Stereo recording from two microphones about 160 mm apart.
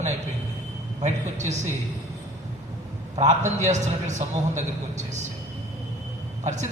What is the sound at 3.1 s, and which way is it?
A man's voice, 45° right (ahead or behind).